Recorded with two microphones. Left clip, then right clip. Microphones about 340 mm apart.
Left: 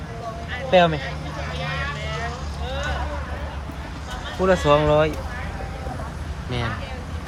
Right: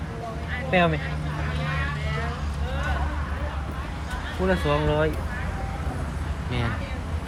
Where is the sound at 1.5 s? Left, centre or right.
Left.